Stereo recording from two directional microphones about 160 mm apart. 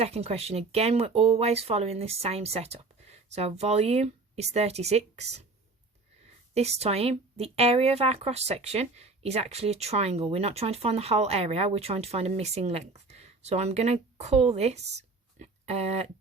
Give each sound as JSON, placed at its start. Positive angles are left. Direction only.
{"t": 0.0, "sound": "speech", "side_deg": -40}
{"t": 6.5, "sound": "speech", "side_deg": -40}